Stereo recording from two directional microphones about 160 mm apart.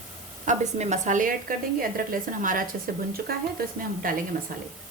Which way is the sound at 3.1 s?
70° right (ahead or behind).